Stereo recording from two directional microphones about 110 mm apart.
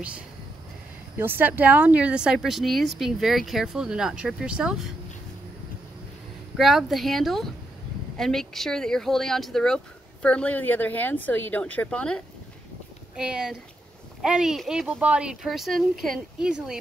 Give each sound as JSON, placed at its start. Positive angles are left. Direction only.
{"t": 1.1, "sound": "a woman's voice", "side_deg": -20}
{"t": 6.5, "sound": "a woman's voice", "side_deg": 0}
{"t": 13.1, "sound": "a woman's voice", "side_deg": -5}